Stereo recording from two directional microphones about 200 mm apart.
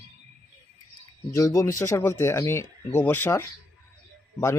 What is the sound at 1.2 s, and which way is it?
Speech, 15° left (ahead or behind).